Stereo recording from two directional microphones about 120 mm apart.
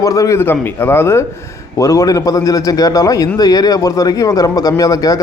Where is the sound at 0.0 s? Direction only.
30° left (ahead or behind).